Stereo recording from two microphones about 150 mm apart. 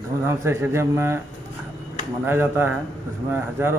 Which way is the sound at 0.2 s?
20° right (ahead or behind).